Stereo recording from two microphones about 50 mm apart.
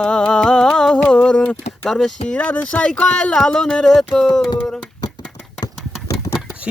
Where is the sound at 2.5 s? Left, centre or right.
Left.